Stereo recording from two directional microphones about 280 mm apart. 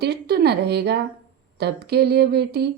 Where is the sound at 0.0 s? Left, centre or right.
Right.